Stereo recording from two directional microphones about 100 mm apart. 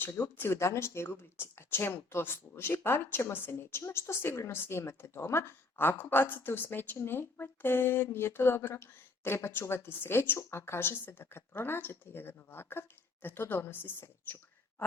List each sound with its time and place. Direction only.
0.0 s speech: 20° left (ahead or behind)